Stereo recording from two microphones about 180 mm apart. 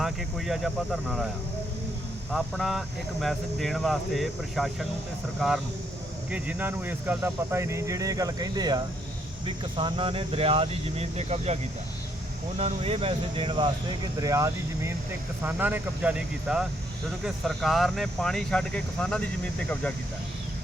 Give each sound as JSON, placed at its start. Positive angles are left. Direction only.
{"t": 0.0, "sound": "speech", "side_deg": 0}
{"t": 2.3, "sound": "speech", "side_deg": 0}
{"t": 6.3, "sound": "speech", "side_deg": -10}
{"t": 12.5, "sound": "speech", "side_deg": -35}